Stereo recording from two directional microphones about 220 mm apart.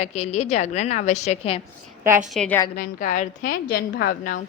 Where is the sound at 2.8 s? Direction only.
35° left (ahead or behind).